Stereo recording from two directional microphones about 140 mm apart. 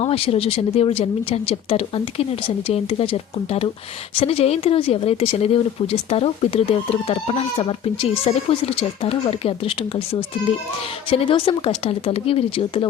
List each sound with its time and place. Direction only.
0.0 s speech: 45° left (ahead or behind)